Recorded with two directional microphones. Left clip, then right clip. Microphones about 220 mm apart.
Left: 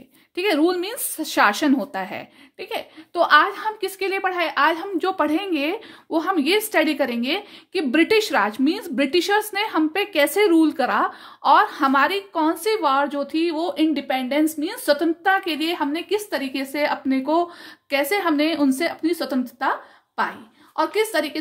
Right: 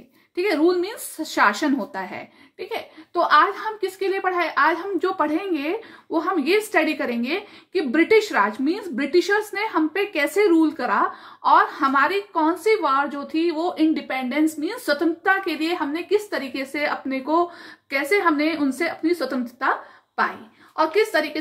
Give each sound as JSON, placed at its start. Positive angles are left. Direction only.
{"t": 0.4, "sound": "a woman's voice", "side_deg": 45}
{"t": 20.7, "sound": "a woman's voice", "side_deg": 50}